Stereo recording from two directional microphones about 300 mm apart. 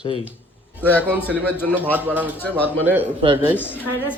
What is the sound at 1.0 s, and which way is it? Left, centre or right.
Speech, centre.